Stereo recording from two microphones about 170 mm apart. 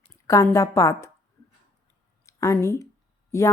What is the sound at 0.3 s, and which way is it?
Speech, 20° left (ahead or behind).